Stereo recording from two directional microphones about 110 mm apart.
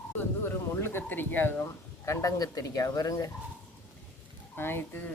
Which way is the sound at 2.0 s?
30° left (ahead or behind).